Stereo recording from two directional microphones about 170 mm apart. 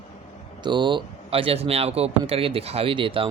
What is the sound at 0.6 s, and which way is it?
Speech, 25° right (ahead or behind).